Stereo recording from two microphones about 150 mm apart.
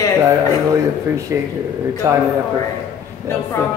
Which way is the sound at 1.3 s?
15° right (ahead or behind).